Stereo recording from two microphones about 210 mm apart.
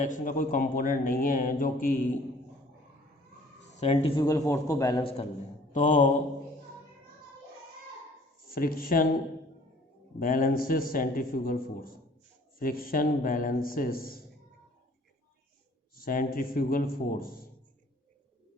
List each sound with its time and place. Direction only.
0.0 s speech: 40° left (ahead or behind)
3.8 s speech: 30° left (ahead or behind)
4.2 s a man's voice: 15° left (ahead or behind)
5.7 s speech: 35° left (ahead or behind)
8.4 s a man's voice: 45° left (ahead or behind)
10.2 s a man's voice: 40° left (ahead or behind)
16.0 s a man's voice: 40° left (ahead or behind)